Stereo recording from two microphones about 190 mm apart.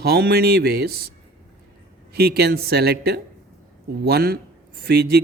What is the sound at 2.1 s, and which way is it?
Speech, 55° right (ahead or behind).